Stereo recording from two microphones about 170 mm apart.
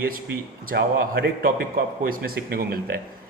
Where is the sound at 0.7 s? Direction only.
60° right (ahead or behind).